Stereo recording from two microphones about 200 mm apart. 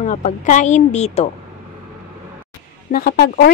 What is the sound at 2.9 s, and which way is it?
Speech, 45° left (ahead or behind).